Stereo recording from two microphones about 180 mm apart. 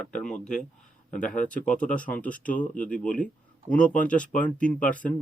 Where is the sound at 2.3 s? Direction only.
50° left (ahead or behind).